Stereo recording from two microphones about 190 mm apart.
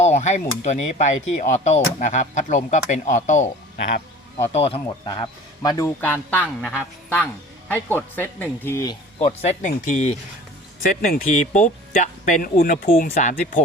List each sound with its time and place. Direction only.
0.0 s speech: 35° left (ahead or behind)
4.4 s speech: 35° left (ahead or behind)
5.0 s a man's voice: 20° left (ahead or behind)
6.4 s a man's voice: 5° right (ahead or behind); by 9.0 s 15° left (ahead or behind)
9.1 s speech: 35° left (ahead or behind)